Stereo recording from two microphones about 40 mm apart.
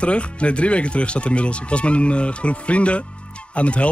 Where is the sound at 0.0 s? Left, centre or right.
Left.